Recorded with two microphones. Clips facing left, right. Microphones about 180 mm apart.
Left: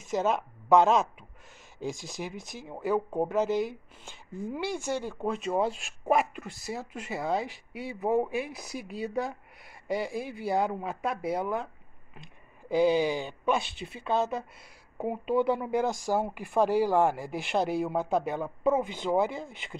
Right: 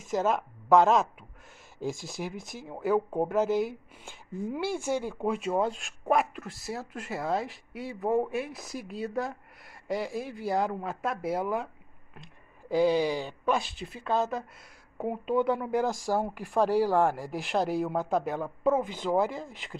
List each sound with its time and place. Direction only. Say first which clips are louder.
0.1 s speech: even; 5° right (ahead or behind)
2.0 s speech: right 1 dB; 5° right (ahead or behind)
2.3 s speech: right 1 dB; 50° right (ahead or behind)
2.6 s speech: right 2 dB; 5° right (ahead or behind)